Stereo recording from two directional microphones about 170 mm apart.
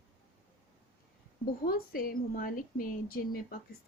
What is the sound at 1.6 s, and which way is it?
A woman's voice, 60° left (ahead or behind).